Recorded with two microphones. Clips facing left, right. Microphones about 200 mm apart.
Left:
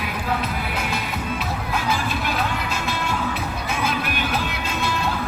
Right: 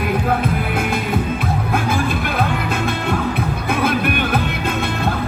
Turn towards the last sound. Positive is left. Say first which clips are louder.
# right 7 dB
turn(degrees=-55)  # may be behind; listen again after turning